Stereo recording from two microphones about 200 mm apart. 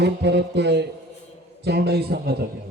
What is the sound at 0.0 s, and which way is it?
A man's voice, 60° right (ahead or behind).